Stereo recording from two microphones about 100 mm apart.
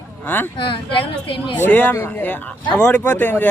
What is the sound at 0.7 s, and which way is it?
Speech, 55° left (ahead or behind).